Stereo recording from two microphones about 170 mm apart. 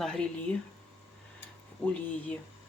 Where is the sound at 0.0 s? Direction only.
5° left (ahead or behind).